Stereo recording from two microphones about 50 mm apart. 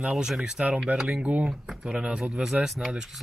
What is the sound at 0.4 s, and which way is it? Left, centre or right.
Speech, centre.